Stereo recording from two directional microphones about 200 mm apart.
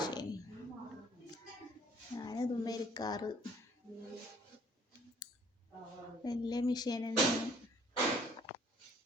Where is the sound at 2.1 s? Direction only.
20° left (ahead or behind).